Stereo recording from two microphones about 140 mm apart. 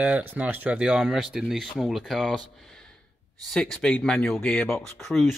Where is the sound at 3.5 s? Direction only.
5° left (ahead or behind).